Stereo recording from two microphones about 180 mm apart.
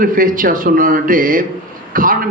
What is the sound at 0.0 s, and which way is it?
A man's voice, 50° right (ahead or behind).